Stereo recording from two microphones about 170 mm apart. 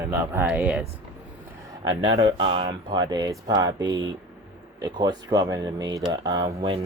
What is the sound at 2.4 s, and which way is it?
Speech, 35° right (ahead or behind).